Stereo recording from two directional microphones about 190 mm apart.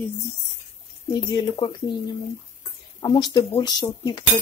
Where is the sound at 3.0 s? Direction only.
20° left (ahead or behind).